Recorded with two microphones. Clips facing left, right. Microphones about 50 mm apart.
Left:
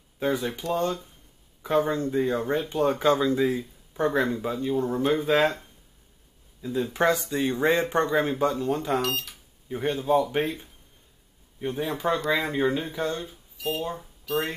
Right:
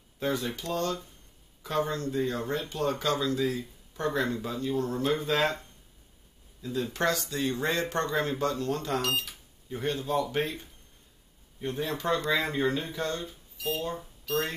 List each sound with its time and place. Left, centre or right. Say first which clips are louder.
0.2 s speech: left 4 dB; centre
9.0 s speech: left 1 dB; centre
9.7 s speech: left 6 dB; centre